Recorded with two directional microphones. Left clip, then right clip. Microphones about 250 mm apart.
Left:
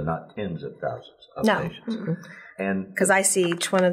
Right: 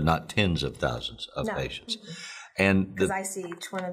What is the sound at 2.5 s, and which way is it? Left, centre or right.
Speech, right.